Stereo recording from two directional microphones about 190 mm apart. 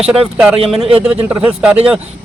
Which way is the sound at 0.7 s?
30° right (ahead or behind).